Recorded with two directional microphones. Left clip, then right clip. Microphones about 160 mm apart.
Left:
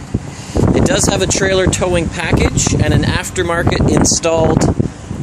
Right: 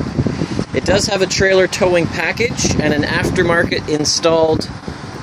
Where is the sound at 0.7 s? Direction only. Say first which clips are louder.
Left 1 dB; 10° left (ahead or behind).